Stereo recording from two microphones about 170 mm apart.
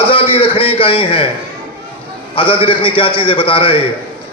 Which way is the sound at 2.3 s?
30° left (ahead or behind).